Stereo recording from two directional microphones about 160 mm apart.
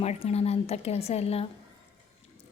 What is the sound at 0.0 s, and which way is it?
A woman's voice, 40° left (ahead or behind).